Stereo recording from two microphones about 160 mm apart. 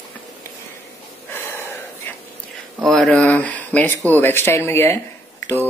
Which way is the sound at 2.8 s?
Centre (ahead or behind).